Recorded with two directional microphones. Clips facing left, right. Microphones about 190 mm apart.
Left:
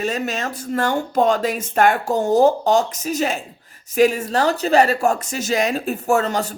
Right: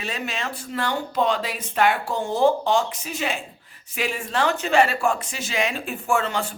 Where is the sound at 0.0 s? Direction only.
45° left (ahead or behind).